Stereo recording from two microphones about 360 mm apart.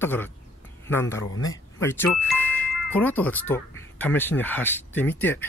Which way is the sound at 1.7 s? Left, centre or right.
Centre.